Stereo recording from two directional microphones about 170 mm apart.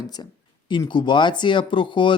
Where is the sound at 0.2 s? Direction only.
25° left (ahead or behind).